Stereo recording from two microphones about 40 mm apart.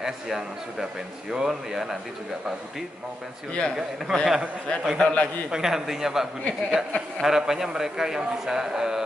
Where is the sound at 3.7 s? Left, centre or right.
Centre.